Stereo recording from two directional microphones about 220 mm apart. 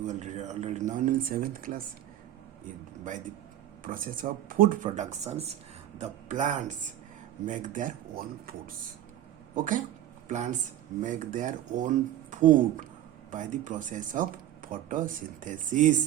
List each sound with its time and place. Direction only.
0.0 s speech: 35° right (ahead or behind)
3.8 s speech: 40° right (ahead or behind)